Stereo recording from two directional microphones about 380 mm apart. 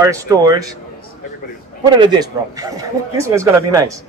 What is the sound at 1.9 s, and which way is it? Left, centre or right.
Speech, centre.